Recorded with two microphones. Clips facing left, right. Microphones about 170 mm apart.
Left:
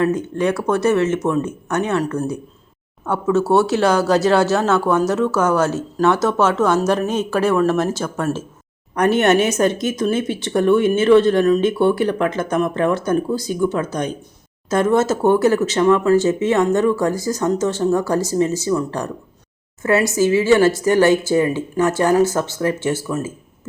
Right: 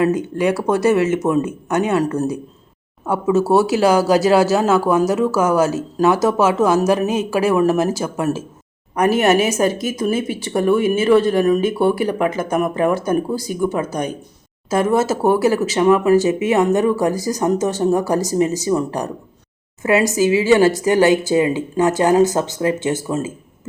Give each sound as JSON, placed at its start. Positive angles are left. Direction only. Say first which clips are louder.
{"t": 0.0, "sound": "speech", "louder": "right 1 dB", "side_deg": -10}